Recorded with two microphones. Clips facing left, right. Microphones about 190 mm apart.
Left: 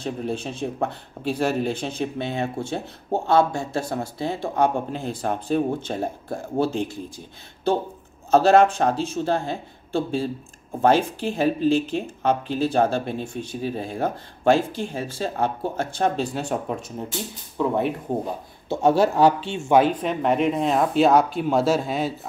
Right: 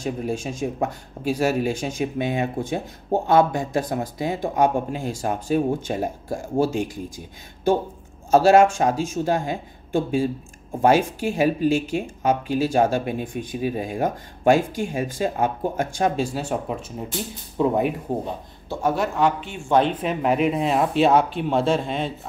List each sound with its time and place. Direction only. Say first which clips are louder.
0.0 s speech: right 1 dB; 10° right (ahead or behind)
8.3 s speech: right 1 dB; 10° right (ahead or behind)
18.7 s speech: left 5 dB; 25° left (ahead or behind)
20.0 s speech: even; 5° right (ahead or behind)